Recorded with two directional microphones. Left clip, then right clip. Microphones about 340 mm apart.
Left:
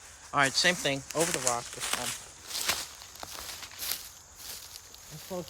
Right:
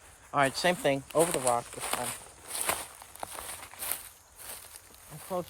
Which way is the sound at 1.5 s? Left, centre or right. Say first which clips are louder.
Right 1 dB; centre.